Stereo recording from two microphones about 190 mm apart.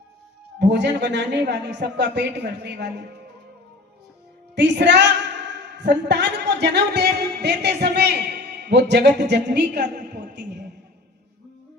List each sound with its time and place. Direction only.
0.6 s speech: 65° right (ahead or behind)
4.5 s a sound: 65° right (ahead or behind)
6.1 s speech: 65° right (ahead or behind)